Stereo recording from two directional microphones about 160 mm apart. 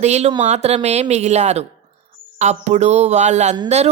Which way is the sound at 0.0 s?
45° right (ahead or behind).